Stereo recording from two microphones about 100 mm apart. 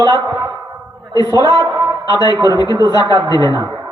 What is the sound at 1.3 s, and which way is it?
A man's voice, 50° right (ahead or behind).